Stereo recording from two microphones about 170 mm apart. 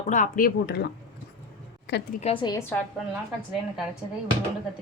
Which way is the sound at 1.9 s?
90° left.